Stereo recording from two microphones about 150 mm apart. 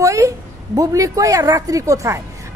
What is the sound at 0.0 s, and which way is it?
A woman's voice, 20° right (ahead or behind).